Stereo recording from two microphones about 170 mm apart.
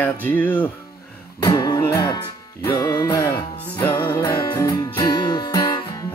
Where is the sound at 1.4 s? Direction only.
20° left (ahead or behind).